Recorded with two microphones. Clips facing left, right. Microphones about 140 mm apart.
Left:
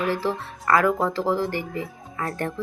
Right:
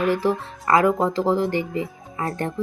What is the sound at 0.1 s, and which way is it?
Speech, 20° right (ahead or behind).